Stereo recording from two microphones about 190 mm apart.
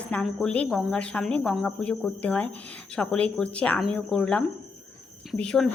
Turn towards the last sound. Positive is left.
turn(degrees=5)  # may be behind; listen again after turning